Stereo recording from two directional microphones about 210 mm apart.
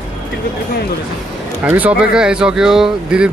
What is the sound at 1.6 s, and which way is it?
Speech, 10° right (ahead or behind).